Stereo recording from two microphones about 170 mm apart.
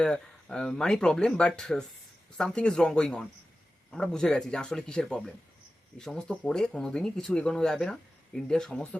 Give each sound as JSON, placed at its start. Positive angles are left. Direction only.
{"t": 0.0, "sound": "speech", "side_deg": 5}